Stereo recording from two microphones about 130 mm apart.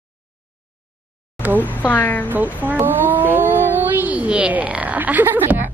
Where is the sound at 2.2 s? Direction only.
15° right (ahead or behind).